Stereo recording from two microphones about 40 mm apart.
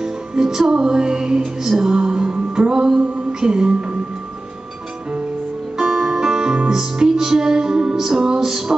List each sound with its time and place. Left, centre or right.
0.0 s music: centre
5.9 s music: centre